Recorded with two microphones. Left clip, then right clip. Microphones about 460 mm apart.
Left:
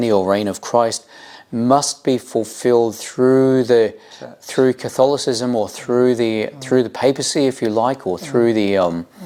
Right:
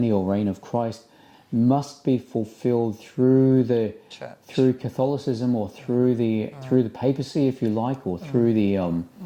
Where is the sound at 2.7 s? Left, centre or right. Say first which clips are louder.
Left 10 dB; centre.